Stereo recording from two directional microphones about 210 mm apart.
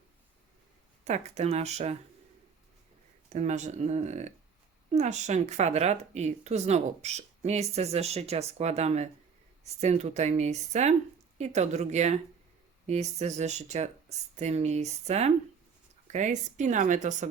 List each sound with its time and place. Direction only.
1.0 s speech: 30° right (ahead or behind)
3.3 s speech: 35° right (ahead or behind)